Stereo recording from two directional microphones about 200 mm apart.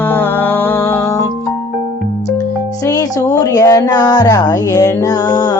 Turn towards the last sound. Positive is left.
turn(degrees=20)  # may be behind; listen again after turning